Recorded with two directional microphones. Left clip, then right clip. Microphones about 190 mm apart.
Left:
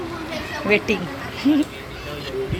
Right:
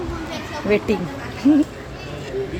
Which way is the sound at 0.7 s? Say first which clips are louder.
Left 1 dB; 15° right (ahead or behind).